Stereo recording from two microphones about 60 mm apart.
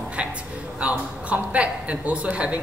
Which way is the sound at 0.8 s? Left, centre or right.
Right.